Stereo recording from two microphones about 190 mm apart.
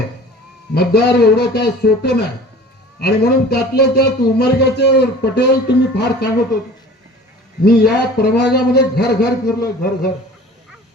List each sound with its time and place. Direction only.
0.7 s speech: 55° left (ahead or behind)
7.6 s speech: 55° left (ahead or behind)